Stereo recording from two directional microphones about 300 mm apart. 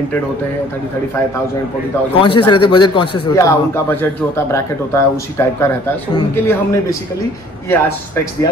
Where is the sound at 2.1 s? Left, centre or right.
Centre.